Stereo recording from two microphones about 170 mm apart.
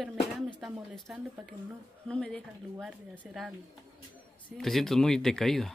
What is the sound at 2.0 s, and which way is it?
Speech, 5° left (ahead or behind).